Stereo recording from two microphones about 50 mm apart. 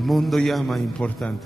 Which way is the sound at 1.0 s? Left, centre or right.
Left.